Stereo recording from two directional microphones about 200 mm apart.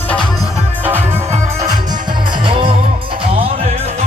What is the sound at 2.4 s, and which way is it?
Music, 25° right (ahead or behind).